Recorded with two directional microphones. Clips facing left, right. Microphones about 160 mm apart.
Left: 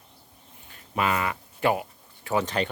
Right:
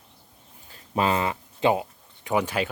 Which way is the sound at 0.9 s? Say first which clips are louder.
Right 3 dB; 30° right (ahead or behind).